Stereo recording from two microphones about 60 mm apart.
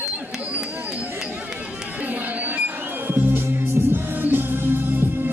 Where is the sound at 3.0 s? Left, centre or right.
Right.